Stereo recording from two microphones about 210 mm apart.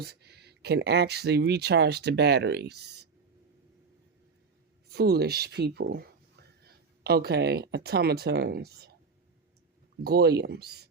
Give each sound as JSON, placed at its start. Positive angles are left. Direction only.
{"t": 0.0, "sound": "speech", "side_deg": -50}
{"t": 4.9, "sound": "speech", "side_deg": -50}
{"t": 10.0, "sound": "speech", "side_deg": -50}